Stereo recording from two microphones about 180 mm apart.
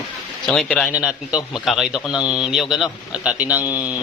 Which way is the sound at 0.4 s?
Centre (ahead or behind).